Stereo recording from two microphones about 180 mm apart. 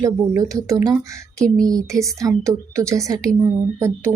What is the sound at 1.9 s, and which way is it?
Speech, centre (ahead or behind).